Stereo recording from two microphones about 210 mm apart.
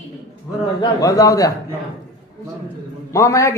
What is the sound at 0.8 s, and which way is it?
Speech, 15° left (ahead or behind).